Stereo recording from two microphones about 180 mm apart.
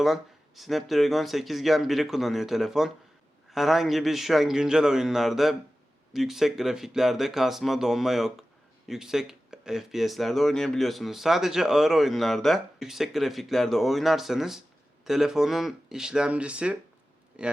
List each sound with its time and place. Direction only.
0.0 s speech: centre (ahead or behind)